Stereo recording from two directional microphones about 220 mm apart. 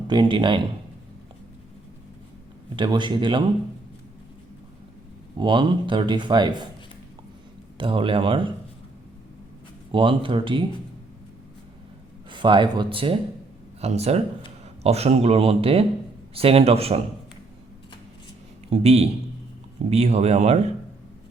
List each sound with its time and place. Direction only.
0.1 s speech: 20° right (ahead or behind)
2.7 s speech: 20° right (ahead or behind)
5.4 s speech: 20° right (ahead or behind)
7.8 s speech: 25° right (ahead or behind)
9.9 s speech: 20° right (ahead or behind)
12.3 s speech: 20° right (ahead or behind)
18.7 s speech: 30° right (ahead or behind)